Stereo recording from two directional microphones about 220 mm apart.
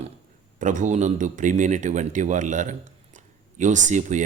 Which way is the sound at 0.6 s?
35° right (ahead or behind).